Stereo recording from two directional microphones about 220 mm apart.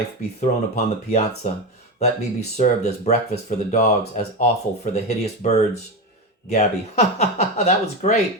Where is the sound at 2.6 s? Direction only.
30° left (ahead or behind).